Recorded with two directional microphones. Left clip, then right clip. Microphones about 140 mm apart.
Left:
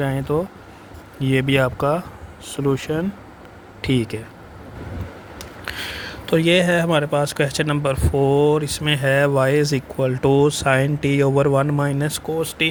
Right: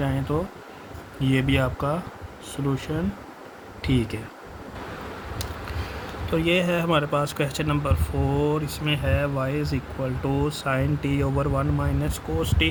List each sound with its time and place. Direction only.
0.0 s speech: 55° left (ahead or behind)
3.8 s speech: 45° left (ahead or behind)
6.3 s speech: 35° left (ahead or behind)
11.4 s speech: 45° left (ahead or behind)